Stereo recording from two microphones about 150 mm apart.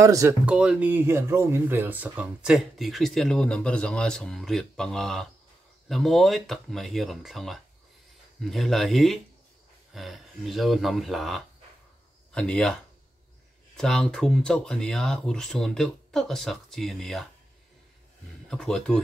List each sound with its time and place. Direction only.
0.0 s speech: 20° right (ahead or behind)
0.5 s speech: 10° right (ahead or behind)
13.7 s speech: centre (ahead or behind)
18.5 s speech: 5° left (ahead or behind)